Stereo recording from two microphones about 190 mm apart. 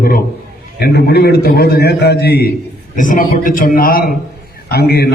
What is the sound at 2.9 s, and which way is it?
A man's voice, 45° left (ahead or behind).